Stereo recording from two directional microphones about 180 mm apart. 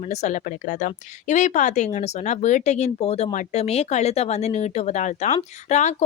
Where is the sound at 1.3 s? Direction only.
40° left (ahead or behind).